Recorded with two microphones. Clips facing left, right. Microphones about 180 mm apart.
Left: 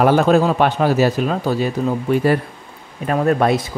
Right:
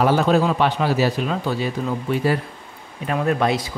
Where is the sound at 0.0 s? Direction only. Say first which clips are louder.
Left 4 dB; 50° left (ahead or behind).